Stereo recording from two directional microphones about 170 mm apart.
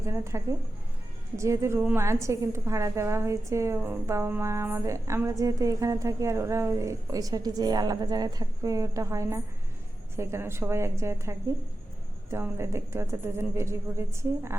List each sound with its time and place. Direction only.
0.0 s a woman's voice: 15° right (ahead or behind)